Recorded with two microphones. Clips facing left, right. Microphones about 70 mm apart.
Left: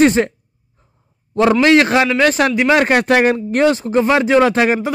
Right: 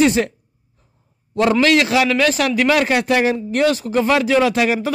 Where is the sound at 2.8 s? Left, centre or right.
Left.